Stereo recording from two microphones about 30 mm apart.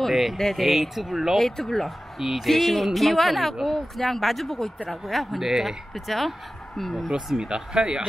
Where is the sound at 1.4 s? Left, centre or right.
Centre.